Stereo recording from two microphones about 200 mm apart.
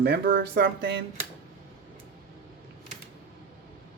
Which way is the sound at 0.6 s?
65° right (ahead or behind).